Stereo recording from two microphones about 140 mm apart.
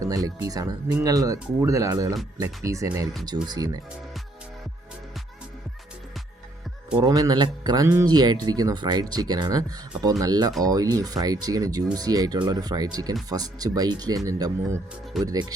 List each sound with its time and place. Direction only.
0.0 s speech: 25° right (ahead or behind)
6.9 s a man's voice: 30° right (ahead or behind)